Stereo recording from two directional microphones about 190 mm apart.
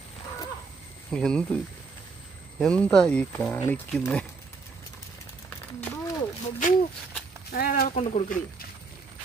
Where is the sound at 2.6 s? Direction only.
5° left (ahead or behind).